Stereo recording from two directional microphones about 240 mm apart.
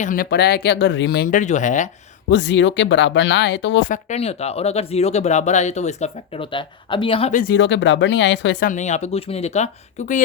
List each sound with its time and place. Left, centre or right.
0.0 s speech: left
2.3 s speech: left
3.8 s speech: left
7.5 s speech: left
8.6 s speech: left